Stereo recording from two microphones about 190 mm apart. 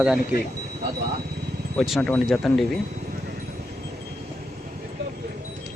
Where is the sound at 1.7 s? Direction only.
Centre (ahead or behind).